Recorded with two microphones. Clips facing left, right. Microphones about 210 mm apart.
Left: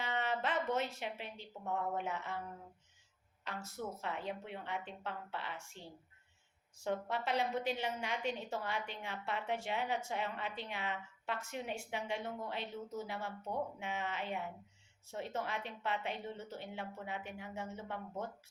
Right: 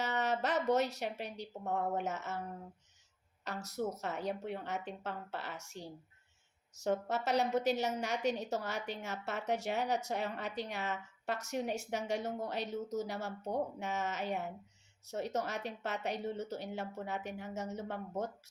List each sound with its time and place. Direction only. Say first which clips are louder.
0.0 s a sound: right 3 dB; 40° right (ahead or behind)
0.9 s a woman's voice: right 4 dB; 40° right (ahead or behind)
4.0 s a woman's voice: right 4 dB; 40° right (ahead or behind)